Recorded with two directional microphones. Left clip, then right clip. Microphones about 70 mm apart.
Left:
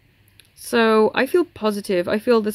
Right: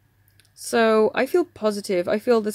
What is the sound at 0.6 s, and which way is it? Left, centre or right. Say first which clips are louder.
Speech: left 2 dB; right.